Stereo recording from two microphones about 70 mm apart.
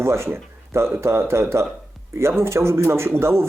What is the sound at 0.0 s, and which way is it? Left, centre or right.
Speech, right.